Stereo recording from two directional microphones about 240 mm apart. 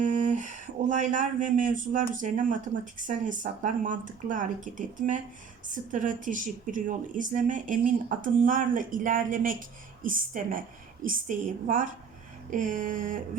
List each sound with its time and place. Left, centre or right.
0.0 s speech: right